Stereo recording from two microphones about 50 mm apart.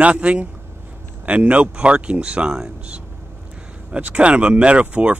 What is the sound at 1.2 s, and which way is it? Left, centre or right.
Speech, right.